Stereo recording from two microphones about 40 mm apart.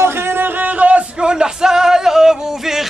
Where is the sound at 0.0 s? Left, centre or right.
Right.